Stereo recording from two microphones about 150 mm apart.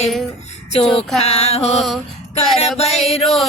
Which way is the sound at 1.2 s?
45° left (ahead or behind).